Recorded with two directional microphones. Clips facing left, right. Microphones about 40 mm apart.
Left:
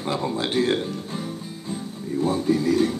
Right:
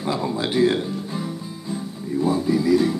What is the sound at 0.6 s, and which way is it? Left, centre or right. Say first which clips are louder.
Music: right 3 dB; centre.